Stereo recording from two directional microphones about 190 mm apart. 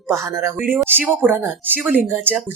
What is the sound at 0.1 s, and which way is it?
Speech, 15° right (ahead or behind).